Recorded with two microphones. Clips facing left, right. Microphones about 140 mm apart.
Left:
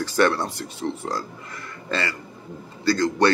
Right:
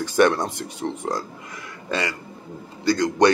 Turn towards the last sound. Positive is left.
turn(degrees=-15)  # may be behind; listen again after turning